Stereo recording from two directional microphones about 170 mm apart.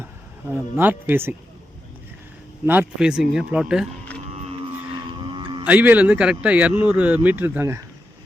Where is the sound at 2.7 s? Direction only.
5° right (ahead or behind).